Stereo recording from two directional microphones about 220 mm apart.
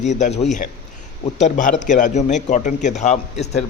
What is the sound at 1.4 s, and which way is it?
A man's voice, 35° left (ahead or behind).